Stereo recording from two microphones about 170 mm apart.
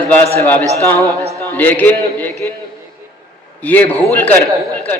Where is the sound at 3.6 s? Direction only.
10° left (ahead or behind).